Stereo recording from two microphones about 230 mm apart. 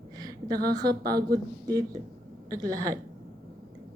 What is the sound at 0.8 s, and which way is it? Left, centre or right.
Speech, centre.